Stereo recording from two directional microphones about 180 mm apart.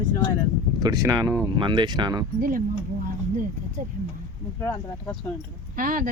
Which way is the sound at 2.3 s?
50° right (ahead or behind).